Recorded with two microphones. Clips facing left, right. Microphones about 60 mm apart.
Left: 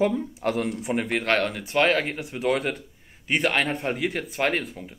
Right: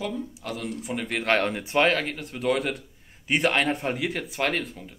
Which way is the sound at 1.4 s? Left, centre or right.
Centre.